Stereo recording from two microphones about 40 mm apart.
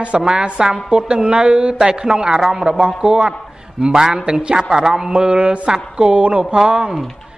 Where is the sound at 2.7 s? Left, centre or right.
Right.